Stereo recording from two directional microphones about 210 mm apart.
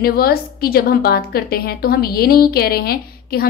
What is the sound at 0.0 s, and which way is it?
A woman's voice, 45° left (ahead or behind).